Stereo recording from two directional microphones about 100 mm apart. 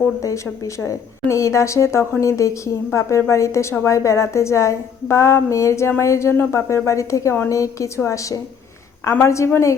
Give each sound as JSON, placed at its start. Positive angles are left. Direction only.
{"t": 0.8, "sound": "a woman's voice", "side_deg": 30}